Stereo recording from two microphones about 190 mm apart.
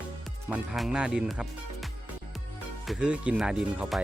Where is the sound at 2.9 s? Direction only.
5° right (ahead or behind).